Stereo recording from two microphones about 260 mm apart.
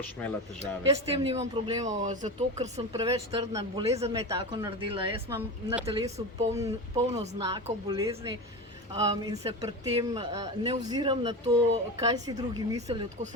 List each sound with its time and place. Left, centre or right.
0.9 s speech: right
5.3 s speech: centre
5.8 s speech: right
7.5 s speech: centre